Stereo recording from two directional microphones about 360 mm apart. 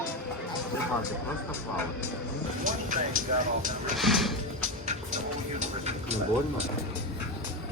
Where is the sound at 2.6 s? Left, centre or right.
Right.